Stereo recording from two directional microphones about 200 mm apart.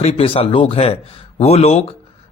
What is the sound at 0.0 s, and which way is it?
Speech, 30° left (ahead or behind).